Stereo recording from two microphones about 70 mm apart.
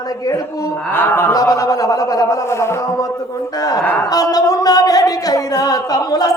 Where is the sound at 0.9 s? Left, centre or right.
Left.